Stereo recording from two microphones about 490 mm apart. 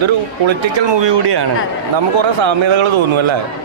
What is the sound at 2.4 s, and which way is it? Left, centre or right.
Speech, right.